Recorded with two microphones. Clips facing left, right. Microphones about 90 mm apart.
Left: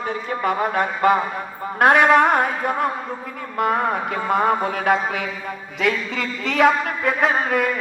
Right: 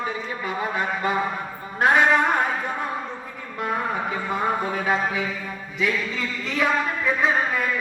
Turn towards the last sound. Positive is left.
turn(degrees=65)  # may be behind; listen again after turning